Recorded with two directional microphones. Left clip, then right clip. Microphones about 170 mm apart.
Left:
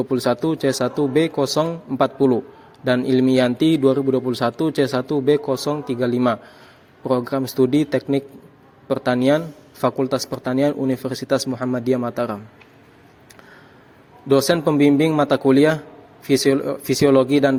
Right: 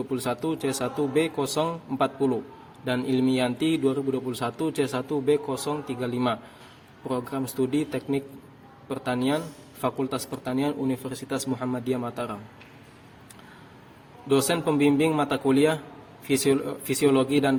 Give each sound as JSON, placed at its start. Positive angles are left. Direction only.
{"t": 0.1, "sound": "a man's voice", "side_deg": 35}
{"t": 14.3, "sound": "a man's voice", "side_deg": 35}